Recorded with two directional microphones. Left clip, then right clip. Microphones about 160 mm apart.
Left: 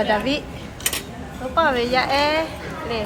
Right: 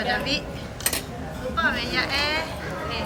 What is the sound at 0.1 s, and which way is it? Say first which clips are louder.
Speech: left 4 dB; 25° left (ahead or behind).